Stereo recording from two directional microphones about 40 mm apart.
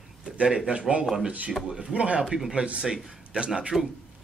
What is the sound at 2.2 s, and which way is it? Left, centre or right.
Speech, centre.